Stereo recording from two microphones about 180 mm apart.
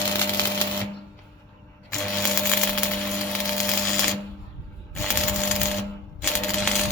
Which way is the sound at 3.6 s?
Centre (ahead or behind).